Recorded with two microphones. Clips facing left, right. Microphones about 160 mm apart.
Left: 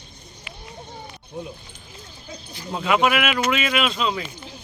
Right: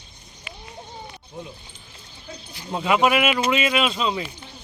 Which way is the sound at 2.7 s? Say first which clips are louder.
Right 1 dB; 10° right (ahead or behind).